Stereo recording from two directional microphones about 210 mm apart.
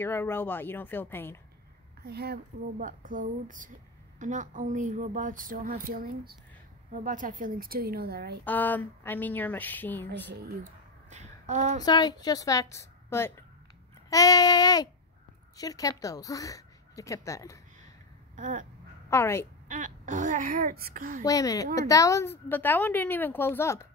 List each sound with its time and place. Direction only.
0.0 s a woman's voice: 10° left (ahead or behind)
2.0 s a woman's voice: 50° right (ahead or behind)
8.5 s a woman's voice: 10° left (ahead or behind)
10.3 s a woman's voice: 50° right (ahead or behind)
11.1 s a sound: 35° right (ahead or behind)
11.8 s a woman's voice: 20° left (ahead or behind)
18.3 s a sound: 35° right (ahead or behind)
19.0 s a woman's voice: 10° left (ahead or behind)
19.7 s a woman's voice: 40° right (ahead or behind)
21.2 s a woman's voice: 15° left (ahead or behind)